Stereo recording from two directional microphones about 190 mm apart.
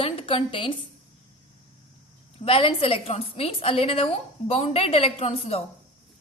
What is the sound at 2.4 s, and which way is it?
A woman's voice, 30° left (ahead or behind).